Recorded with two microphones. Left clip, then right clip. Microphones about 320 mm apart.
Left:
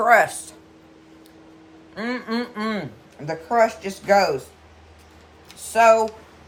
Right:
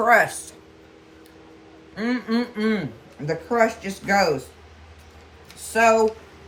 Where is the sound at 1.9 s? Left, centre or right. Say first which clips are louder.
Right 1 dB; centre.